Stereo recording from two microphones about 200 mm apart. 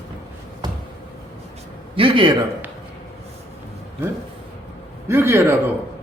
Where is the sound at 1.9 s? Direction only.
25° right (ahead or behind).